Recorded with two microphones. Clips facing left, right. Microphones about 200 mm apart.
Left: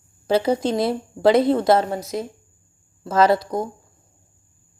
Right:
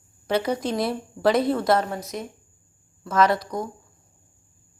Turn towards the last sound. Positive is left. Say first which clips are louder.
# left 4 dB
turn(degrees=25)  # may be behind; listen again after turning